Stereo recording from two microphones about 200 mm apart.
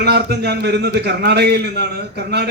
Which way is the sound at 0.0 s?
55° right (ahead or behind).